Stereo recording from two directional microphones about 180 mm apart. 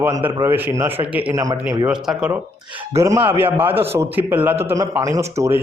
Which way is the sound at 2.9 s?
15° right (ahead or behind).